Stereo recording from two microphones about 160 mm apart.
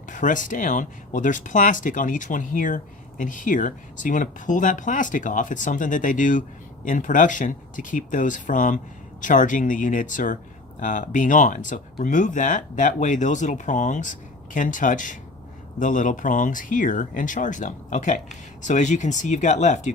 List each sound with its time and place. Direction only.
0.1 s speech: 55° left (ahead or behind)